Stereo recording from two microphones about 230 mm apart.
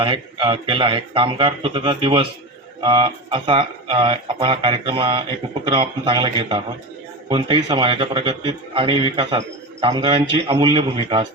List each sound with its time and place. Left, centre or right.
0.0 s speech: right